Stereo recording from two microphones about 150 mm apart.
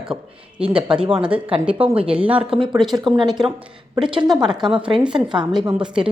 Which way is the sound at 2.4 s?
35° right (ahead or behind).